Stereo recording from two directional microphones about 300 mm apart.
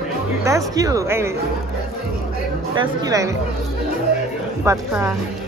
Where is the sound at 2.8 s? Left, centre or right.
Centre.